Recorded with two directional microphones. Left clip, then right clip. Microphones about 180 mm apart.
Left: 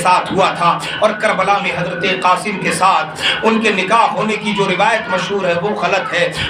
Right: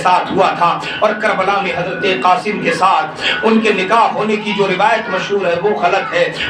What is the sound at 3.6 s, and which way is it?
Speech, 35° left (ahead or behind).